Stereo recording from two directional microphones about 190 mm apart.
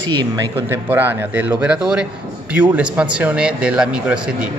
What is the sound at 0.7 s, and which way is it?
A man's voice, 10° right (ahead or behind).